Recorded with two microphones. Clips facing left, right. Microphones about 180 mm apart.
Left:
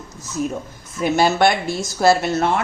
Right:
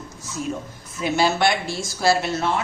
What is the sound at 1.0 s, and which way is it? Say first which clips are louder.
A woman's voice: left 4 dB; 50° left (ahead or behind).